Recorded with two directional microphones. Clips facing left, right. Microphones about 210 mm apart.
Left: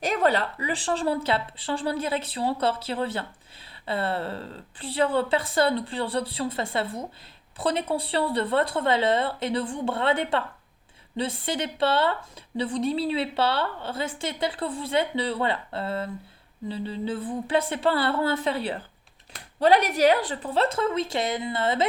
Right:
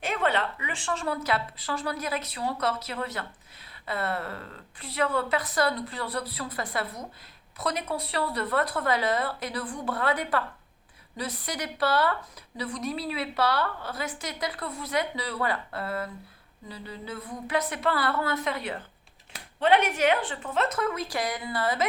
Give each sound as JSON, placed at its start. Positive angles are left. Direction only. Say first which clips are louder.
{"t": 0.0, "sound": "a woman's voice", "louder": "left 4 dB", "side_deg": 40}